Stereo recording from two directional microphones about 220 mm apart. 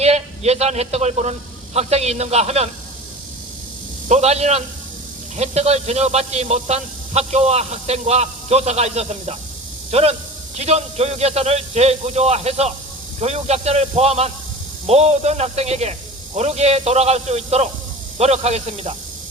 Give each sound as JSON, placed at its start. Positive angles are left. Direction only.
{"t": 0.0, "sound": "a man's voice", "side_deg": -30}
{"t": 4.1, "sound": "speech", "side_deg": -30}